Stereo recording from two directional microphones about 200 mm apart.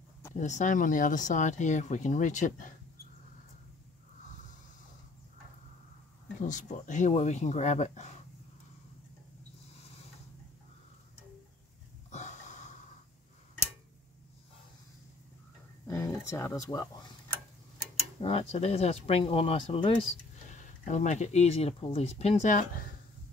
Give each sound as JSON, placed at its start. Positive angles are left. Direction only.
{"t": 0.4, "sound": "speech", "side_deg": 35}
{"t": 6.4, "sound": "speech", "side_deg": 40}
{"t": 12.1, "sound": "a sound", "side_deg": 35}
{"t": 15.9, "sound": "speech", "side_deg": 15}
{"t": 18.2, "sound": "speech", "side_deg": 30}
{"t": 20.5, "sound": "speech", "side_deg": 40}